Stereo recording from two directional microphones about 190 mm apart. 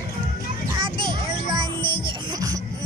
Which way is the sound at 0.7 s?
25° right (ahead or behind).